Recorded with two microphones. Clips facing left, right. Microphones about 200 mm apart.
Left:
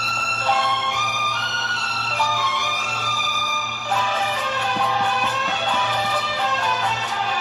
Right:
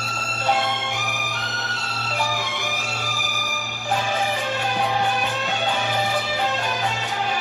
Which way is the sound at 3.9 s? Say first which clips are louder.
Right 1 dB; 20° right (ahead or behind).